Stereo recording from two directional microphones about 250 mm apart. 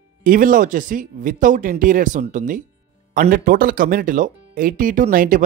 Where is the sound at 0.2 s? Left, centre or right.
Right.